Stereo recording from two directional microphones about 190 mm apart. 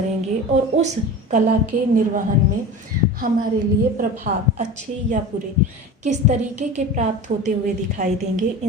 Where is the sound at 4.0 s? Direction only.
40° right (ahead or behind).